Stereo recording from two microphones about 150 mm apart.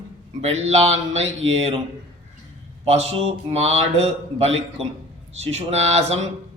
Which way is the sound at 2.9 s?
45° right (ahead or behind).